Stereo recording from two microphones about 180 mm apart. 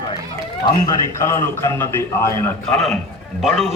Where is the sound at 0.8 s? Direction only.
15° left (ahead or behind).